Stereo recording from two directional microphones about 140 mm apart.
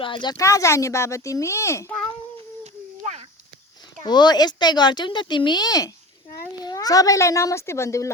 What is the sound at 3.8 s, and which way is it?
Speech, 30° left (ahead or behind).